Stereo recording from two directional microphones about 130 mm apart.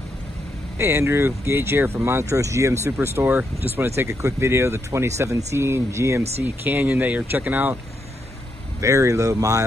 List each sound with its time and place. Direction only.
0.7 s speech: 20° right (ahead or behind)
8.8 s speech: 25° right (ahead or behind)